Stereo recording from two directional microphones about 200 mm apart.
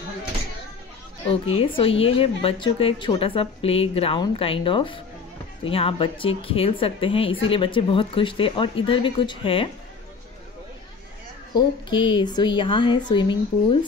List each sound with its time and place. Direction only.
1.3 s a woman's voice: 30° left (ahead or behind)
11.5 s a woman's voice: 25° left (ahead or behind)